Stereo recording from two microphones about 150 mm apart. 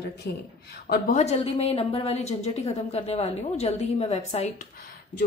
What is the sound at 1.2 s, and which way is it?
A woman's voice, 45° left (ahead or behind).